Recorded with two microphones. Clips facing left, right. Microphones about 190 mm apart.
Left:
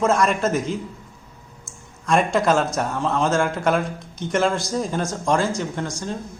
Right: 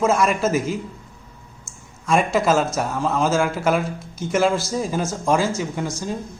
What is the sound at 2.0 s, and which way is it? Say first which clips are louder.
A man's voice: even; centre (ahead or behind).